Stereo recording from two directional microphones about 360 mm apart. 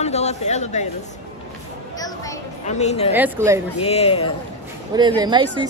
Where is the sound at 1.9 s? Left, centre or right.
Centre.